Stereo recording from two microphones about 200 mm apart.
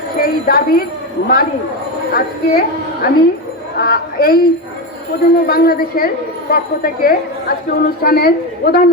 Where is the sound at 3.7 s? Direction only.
50° left (ahead or behind).